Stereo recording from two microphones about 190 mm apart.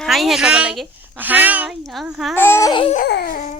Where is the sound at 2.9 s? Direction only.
55° left (ahead or behind).